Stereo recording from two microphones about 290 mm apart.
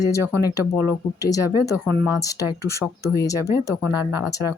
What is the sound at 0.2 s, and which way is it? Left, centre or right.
A woman's voice, centre.